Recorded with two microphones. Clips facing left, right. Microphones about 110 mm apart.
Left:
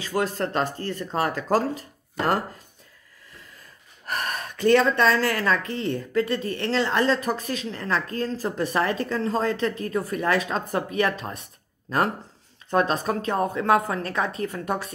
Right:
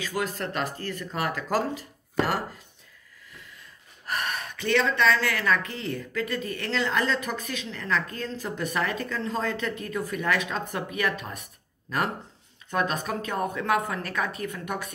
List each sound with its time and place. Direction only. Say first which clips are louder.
0.0 s speech: left 4 dB; 35° left (ahead or behind)
4.0 s speech: left 1 dB; 45° left (ahead or behind)